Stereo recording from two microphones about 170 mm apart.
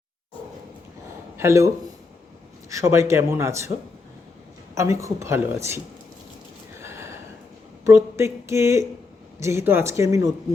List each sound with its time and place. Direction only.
1.4 s speech: 15° right (ahead or behind)
4.7 s speech: 15° right (ahead or behind)
6.7 s gasp: 15° right (ahead or behind)
7.9 s speech: 15° right (ahead or behind)